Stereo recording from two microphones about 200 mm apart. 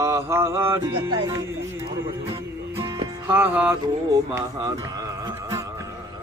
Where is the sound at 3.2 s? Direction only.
10° right (ahead or behind).